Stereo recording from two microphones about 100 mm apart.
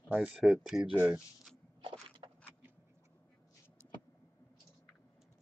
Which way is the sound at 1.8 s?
55° right (ahead or behind).